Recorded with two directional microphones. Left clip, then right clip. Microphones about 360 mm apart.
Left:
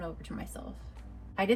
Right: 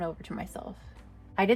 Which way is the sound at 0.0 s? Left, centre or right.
Right.